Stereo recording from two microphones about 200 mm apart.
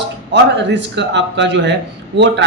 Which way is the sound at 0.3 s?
60° right (ahead or behind).